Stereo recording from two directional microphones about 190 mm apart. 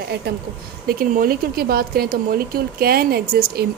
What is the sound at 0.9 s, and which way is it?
Speech, 50° right (ahead or behind).